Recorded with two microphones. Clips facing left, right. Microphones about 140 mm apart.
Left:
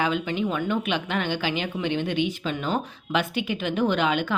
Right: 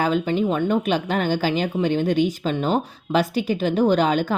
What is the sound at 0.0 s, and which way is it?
Speech, 40° right (ahead or behind).